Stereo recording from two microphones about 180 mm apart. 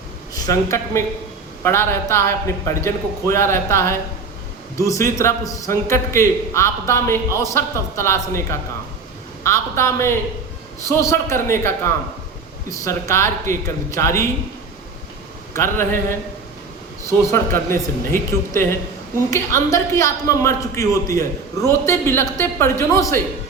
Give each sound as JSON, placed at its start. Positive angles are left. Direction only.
{"t": 0.3, "sound": "a man's voice", "side_deg": 20}
{"t": 12.7, "sound": "a man's voice", "side_deg": 15}
{"t": 15.5, "sound": "a man's voice", "side_deg": 15}
{"t": 17.3, "sound": "a man's voice", "side_deg": 15}